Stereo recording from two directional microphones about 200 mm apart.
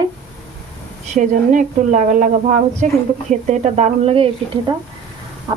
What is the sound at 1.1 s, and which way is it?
A woman's voice, 40° right (ahead or behind).